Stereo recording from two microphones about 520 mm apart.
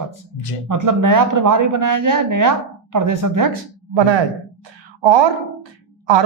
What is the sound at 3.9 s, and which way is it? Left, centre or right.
A woman's voice, right.